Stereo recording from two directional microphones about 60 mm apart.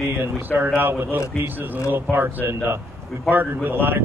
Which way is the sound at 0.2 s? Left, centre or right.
Right.